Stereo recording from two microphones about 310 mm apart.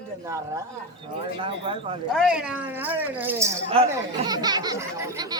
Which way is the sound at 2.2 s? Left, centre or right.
Centre.